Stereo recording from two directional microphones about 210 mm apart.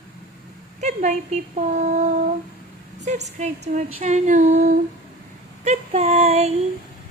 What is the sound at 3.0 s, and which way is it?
A woman's voice, 35° right (ahead or behind).